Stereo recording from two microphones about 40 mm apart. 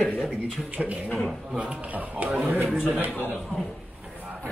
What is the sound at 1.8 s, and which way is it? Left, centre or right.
Speech, right.